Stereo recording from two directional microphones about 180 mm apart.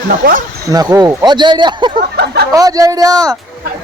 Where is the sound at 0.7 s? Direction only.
20° right (ahead or behind).